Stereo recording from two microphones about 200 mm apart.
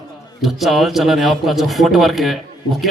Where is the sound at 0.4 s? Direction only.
Centre (ahead or behind).